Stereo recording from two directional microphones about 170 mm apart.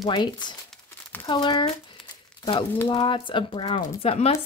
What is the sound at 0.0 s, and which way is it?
Speech, 25° left (ahead or behind).